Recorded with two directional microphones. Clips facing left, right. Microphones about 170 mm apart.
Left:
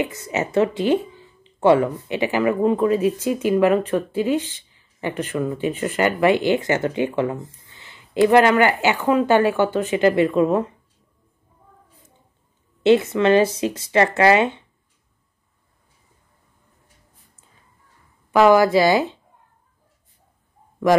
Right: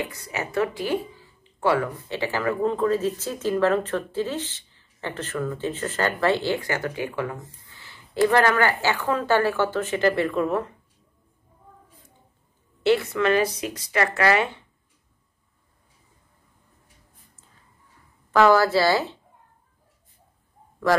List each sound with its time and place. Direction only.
0.0 s speech: 20° left (ahead or behind)
12.8 s speech: 20° left (ahead or behind)
18.3 s speech: 15° left (ahead or behind)